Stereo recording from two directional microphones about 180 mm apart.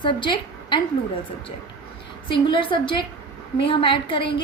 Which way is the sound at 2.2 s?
25° left (ahead or behind).